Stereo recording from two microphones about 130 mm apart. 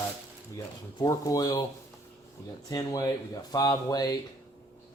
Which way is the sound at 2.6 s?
25° left (ahead or behind).